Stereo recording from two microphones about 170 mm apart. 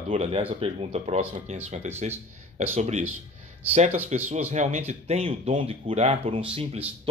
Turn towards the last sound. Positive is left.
turn(degrees=-35)  # may be behind; listen again after turning